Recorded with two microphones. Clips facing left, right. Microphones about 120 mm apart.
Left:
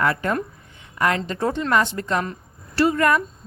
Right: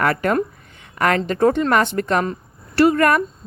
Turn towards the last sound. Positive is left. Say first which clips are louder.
# right 4 dB
turn(degrees=-60)  # may be behind; listen again after turning